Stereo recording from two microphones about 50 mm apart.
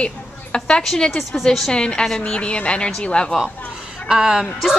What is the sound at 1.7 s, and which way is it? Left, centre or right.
Speech, centre.